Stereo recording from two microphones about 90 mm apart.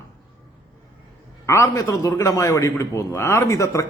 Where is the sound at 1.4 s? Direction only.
35° left (ahead or behind).